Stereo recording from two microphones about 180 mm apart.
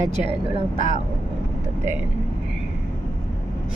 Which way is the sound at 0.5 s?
40° right (ahead or behind).